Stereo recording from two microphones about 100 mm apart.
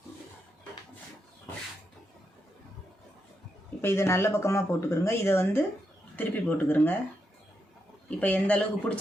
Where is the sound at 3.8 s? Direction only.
25° left (ahead or behind).